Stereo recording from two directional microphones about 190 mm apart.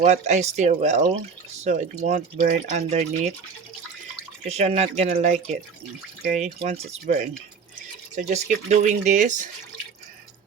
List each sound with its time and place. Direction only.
0.0 s speech: 35° right (ahead or behind)
4.4 s speech: 35° right (ahead or behind)
6.6 s speech: 35° right (ahead or behind)